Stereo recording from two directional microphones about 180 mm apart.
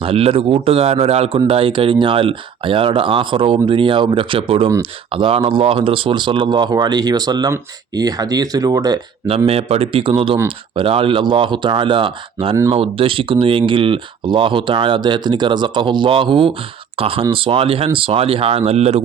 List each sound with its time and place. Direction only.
0.0 s speech: 30° right (ahead or behind)